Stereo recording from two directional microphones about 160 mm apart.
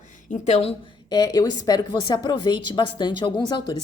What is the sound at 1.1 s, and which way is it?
A woman's voice, 25° left (ahead or behind).